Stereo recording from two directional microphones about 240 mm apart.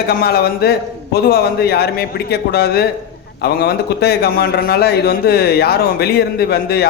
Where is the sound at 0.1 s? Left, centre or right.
Left.